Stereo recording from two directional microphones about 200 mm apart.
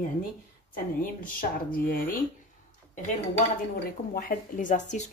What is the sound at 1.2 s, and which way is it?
Speech, 45° left (ahead or behind).